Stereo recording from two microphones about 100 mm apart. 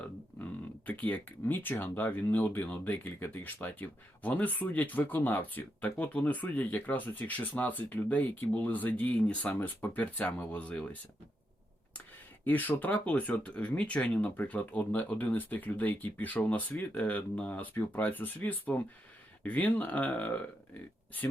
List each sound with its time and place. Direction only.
0.3 s speech: 15° left (ahead or behind)
12.5 s speech: 15° left (ahead or behind)